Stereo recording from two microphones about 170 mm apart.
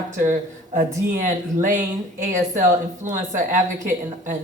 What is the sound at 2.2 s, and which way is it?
Speech, 50° right (ahead or behind).